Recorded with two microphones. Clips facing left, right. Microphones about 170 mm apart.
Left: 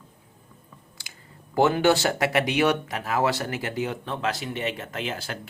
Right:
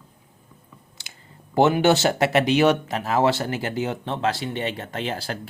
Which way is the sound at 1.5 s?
20° right (ahead or behind).